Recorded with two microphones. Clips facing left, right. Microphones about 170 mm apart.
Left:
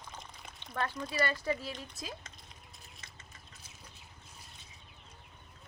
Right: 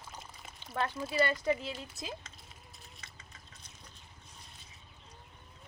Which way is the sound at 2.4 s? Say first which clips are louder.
Right 1 dB; centre (ahead or behind).